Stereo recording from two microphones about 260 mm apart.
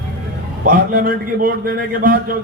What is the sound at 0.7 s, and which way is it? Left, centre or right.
A man's voice, right.